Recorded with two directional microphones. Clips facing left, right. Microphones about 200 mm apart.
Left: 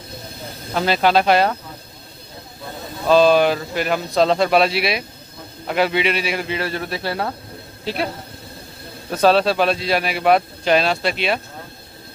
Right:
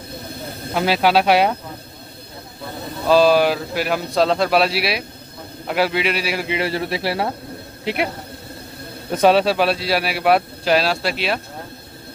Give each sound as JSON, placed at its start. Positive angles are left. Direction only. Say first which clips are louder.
{"t": 0.7, "sound": "speech", "louder": "even", "side_deg": -5}
{"t": 3.1, "sound": "a man's voice", "louder": "even", "side_deg": -5}
{"t": 6.5, "sound": "a man's voice", "louder": "right 2 dB", "side_deg": -25}
{"t": 9.1, "sound": "a man's voice", "louder": "right 1 dB", "side_deg": -15}